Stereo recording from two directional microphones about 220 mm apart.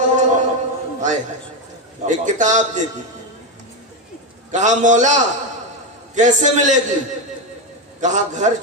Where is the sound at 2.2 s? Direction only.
35° right (ahead or behind).